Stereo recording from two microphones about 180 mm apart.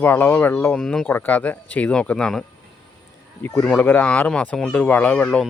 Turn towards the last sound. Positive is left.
turn(degrees=5)  # may be behind; listen again after turning